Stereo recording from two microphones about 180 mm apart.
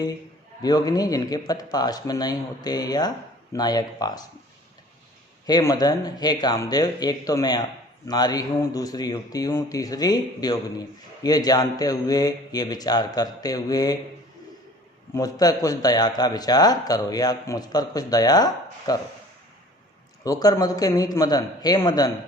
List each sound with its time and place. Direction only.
0.6 s speech: 20° left (ahead or behind)
5.5 s speech: 20° left (ahead or behind)
15.1 s speech: 20° left (ahead or behind)
20.2 s speech: 20° left (ahead or behind)